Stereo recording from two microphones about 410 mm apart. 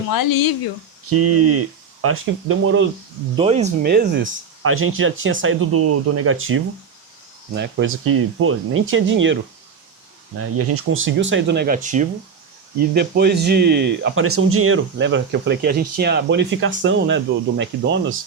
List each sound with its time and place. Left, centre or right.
0.1 s speech: left
1.1 s speech: right
3.3 s speech: centre
10.3 s speech: right